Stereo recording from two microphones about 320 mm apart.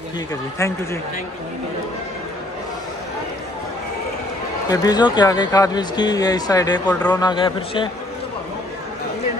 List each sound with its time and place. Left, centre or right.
4.6 s speech: centre